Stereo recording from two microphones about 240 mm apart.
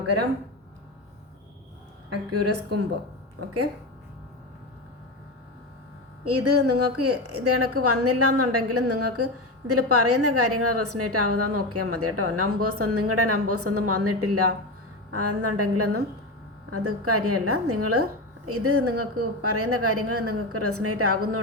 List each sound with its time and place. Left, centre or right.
2.0 s a woman's voice: right
6.2 s a woman's voice: right